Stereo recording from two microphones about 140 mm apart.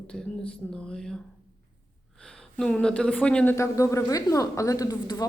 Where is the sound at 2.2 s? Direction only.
5° left (ahead or behind).